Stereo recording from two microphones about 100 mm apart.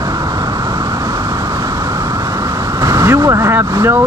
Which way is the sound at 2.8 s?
30° right (ahead or behind).